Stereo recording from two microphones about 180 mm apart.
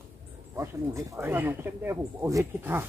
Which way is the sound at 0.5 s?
15° right (ahead or behind).